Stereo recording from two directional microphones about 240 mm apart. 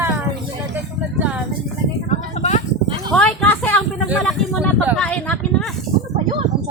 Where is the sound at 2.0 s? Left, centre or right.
Left.